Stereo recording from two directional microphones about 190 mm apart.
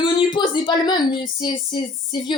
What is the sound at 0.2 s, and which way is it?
A woman's voice, 25° left (ahead or behind).